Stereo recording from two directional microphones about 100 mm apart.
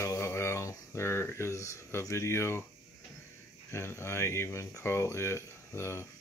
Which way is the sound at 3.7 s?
25° left (ahead or behind).